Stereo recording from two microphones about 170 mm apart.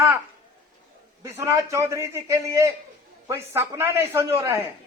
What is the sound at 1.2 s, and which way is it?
Speech, 15° right (ahead or behind).